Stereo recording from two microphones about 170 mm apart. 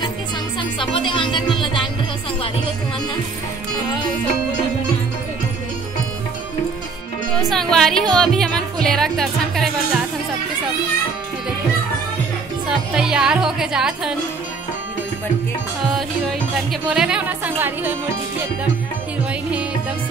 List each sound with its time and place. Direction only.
0.6 s speech: 30° left (ahead or behind)
7.4 s speech: centre (ahead or behind)
12.6 s speech: 5° right (ahead or behind)
16.9 s speech: 5° right (ahead or behind)